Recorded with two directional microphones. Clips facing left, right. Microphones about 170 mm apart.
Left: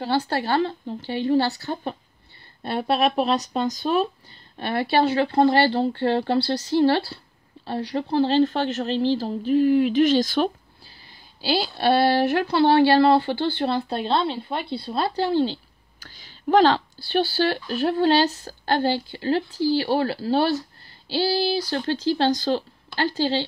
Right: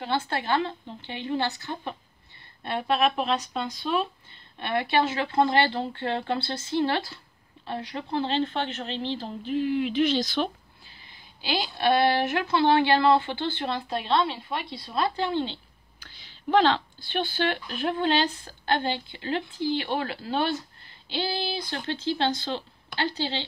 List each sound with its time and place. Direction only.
0.0 s a woman's voice: 35° left (ahead or behind)